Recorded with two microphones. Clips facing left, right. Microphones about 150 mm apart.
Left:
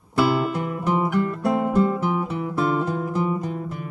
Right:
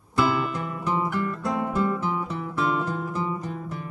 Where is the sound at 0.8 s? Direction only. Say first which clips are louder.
Left 4 dB; 20° left (ahead or behind).